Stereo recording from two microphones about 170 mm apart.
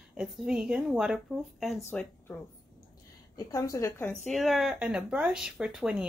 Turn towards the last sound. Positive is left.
turn(degrees=-5)  # may be behind; listen again after turning